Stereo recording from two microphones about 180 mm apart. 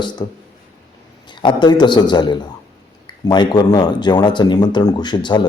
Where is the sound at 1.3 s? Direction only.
25° left (ahead or behind).